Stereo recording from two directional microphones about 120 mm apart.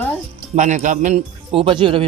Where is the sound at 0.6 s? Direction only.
90° right.